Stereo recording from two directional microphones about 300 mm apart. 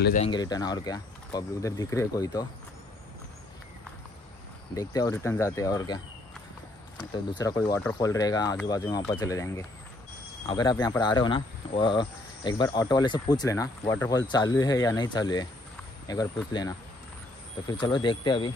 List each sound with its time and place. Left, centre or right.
0.0 s speech: left
4.7 s speech: centre
7.0 s speech: centre
17.6 s speech: centre